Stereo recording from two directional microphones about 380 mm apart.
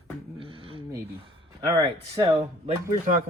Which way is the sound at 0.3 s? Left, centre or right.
Centre.